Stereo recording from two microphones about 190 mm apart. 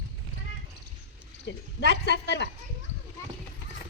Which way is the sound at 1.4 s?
65° left (ahead or behind).